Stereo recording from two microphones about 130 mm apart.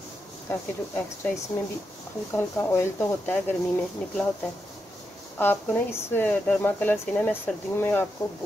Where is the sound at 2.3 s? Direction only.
20° left (ahead or behind).